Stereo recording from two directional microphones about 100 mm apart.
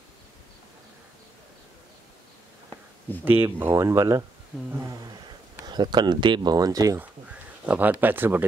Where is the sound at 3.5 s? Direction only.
25° right (ahead or behind).